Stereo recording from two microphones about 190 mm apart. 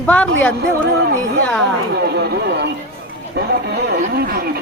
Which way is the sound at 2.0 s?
60° right (ahead or behind).